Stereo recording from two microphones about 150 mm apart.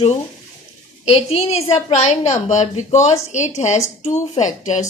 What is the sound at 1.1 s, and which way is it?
A woman's voice, 40° left (ahead or behind).